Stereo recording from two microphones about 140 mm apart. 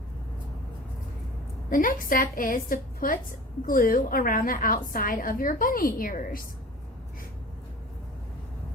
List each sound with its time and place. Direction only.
1.7 s a woman's voice: 75° left (ahead or behind)